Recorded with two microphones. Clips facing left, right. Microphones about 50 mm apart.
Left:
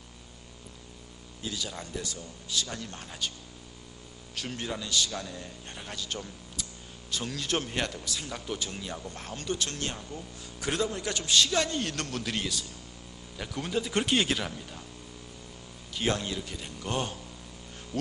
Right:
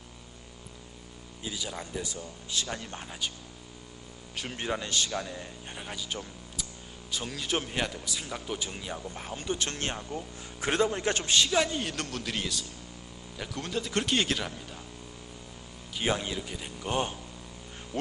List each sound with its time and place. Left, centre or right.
1.5 s speech: centre
2.5 s speech: right
3.1 s speech: centre
4.4 s speech: centre
4.6 s speech: right
5.1 s speech: centre
9.6 s speech: right
11.3 s speech: centre
16.0 s speech: centre